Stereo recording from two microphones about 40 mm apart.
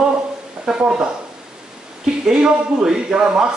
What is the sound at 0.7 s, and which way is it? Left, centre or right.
Speech, right.